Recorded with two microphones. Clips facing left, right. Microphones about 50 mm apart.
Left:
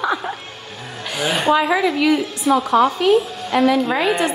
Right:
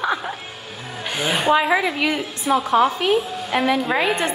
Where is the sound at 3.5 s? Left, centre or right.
Right.